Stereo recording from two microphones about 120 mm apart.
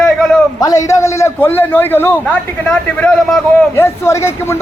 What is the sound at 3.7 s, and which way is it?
Speech, 20° left (ahead or behind).